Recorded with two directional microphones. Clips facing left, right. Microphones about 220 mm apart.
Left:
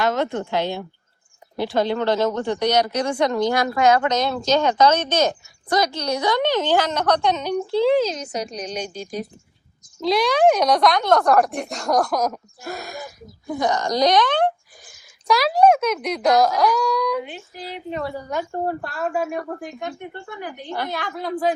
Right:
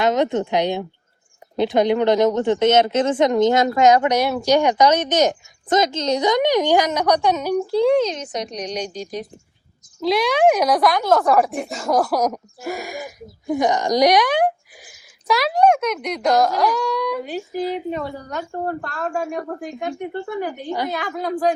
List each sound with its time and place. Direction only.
0.0 s a woman's voice: 20° right (ahead or behind); by 19.4 s 5° left (ahead or behind)
19.9 s speech: 40° right (ahead or behind)
20.7 s speech: 15° right (ahead or behind)